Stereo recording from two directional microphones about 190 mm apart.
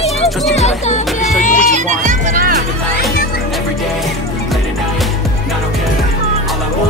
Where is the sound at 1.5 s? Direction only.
40° right (ahead or behind).